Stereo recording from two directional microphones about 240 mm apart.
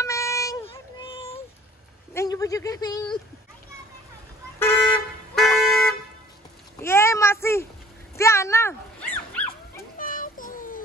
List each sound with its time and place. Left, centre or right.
0.0 s a sound: centre
2.1 s speech: centre
4.9 s vehicle horn: centre
6.8 s a sound: centre
8.2 s dog: centre
9.9 s child singing: left